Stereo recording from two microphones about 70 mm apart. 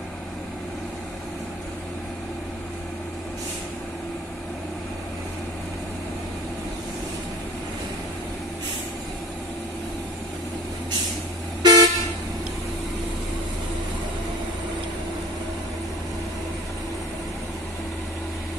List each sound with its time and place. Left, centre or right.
11.6 s vehicle: right